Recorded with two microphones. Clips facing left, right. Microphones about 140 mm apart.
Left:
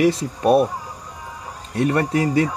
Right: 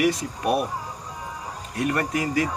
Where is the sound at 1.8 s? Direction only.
30° left (ahead or behind).